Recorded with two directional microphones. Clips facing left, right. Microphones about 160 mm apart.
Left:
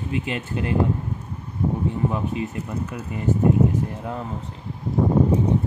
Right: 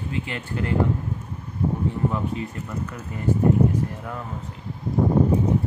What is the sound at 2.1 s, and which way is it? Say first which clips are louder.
Speech: left 1 dB; 15° left (ahead or behind).